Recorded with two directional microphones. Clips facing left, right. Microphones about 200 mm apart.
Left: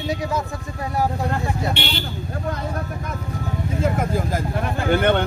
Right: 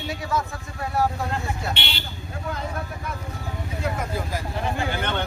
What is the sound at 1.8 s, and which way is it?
Speech, 50° left (ahead or behind).